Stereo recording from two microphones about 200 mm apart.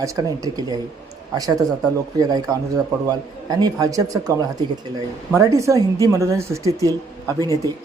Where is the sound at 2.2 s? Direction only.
20° right (ahead or behind).